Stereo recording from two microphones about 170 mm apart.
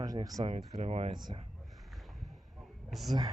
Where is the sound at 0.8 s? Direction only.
40° right (ahead or behind).